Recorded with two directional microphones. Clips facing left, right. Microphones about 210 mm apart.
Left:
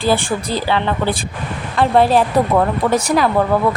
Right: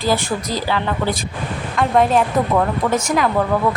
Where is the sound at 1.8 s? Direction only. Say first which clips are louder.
Left 2 dB; 30° left (ahead or behind).